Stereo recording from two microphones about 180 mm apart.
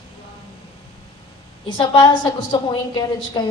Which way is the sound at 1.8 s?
25° left (ahead or behind).